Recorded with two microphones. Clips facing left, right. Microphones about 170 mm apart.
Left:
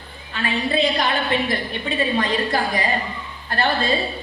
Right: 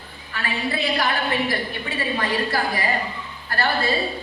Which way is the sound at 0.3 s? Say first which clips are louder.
Left 5 dB; 20° left (ahead or behind).